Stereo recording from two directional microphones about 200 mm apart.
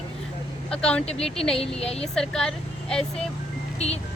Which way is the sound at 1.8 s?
30° left (ahead or behind).